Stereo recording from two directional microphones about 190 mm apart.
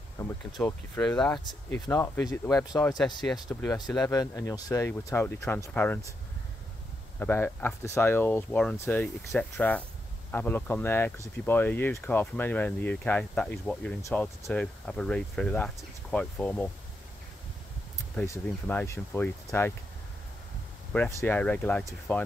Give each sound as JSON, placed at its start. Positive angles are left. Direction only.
{"t": 0.2, "sound": "a sound", "side_deg": 20}
{"t": 0.6, "sound": "speech", "side_deg": 15}
{"t": 1.1, "sound": "speech", "side_deg": 5}
{"t": 7.2, "sound": "speech", "side_deg": 10}
{"t": 18.1, "sound": "speech", "side_deg": 10}
{"t": 20.9, "sound": "speech", "side_deg": 10}